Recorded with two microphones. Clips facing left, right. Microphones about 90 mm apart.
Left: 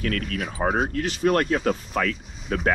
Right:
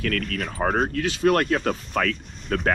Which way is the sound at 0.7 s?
45° right (ahead or behind).